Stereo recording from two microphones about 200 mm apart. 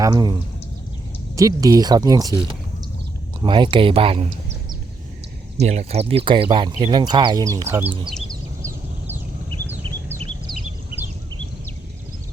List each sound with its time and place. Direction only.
0.0 s speech: 20° right (ahead or behind)
1.4 s speech: 15° right (ahead or behind)
5.5 s speech: 35° right (ahead or behind); by 7.9 s 10° right (ahead or behind)